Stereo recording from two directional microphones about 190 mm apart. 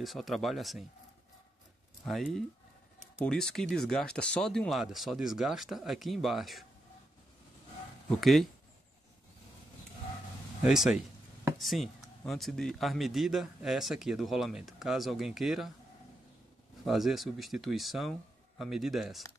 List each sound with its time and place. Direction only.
0.0 s speech: centre (ahead or behind)
2.0 s speech: centre (ahead or behind)
8.1 s speech: centre (ahead or behind)
10.6 s speech: 5° right (ahead or behind)
16.8 s speech: centre (ahead or behind)